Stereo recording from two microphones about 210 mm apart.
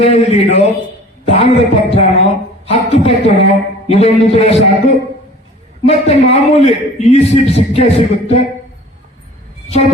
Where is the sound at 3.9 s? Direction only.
30° left (ahead or behind).